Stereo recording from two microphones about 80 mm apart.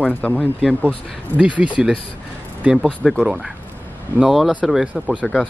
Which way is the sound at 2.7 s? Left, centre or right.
Centre.